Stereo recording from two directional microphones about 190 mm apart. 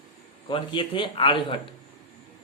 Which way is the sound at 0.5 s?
25° left (ahead or behind).